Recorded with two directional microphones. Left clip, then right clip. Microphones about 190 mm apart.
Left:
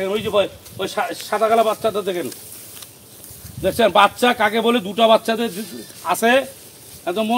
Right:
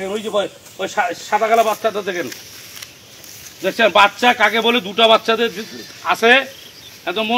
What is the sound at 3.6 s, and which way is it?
Speech, 70° left (ahead or behind).